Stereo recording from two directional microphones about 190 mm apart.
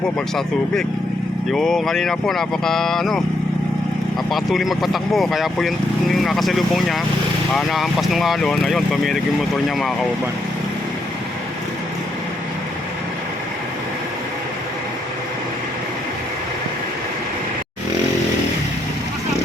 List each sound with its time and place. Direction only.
0.3 s speech: 5° left (ahead or behind)
4.3 s speech: centre (ahead or behind)